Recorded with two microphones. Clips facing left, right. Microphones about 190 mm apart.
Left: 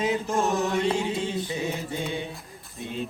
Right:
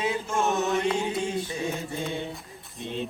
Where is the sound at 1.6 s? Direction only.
Centre (ahead or behind).